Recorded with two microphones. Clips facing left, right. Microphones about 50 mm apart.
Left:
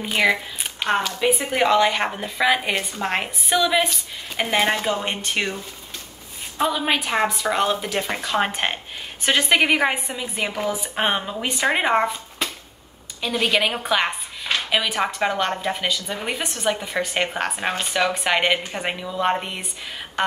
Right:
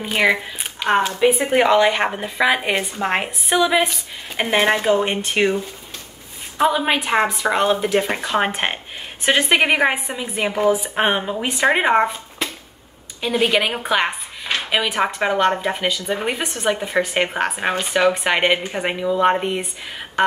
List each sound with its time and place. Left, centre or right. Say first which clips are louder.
0.0 s a woman's voice: right 2 dB; centre
6.6 s a woman's voice: right 4 dB; centre